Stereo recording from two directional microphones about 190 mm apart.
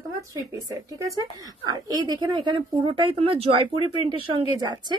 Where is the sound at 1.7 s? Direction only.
20° right (ahead or behind).